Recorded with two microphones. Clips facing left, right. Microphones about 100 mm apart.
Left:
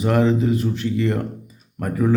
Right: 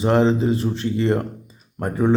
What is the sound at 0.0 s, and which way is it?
Mantra, 30° right (ahead or behind).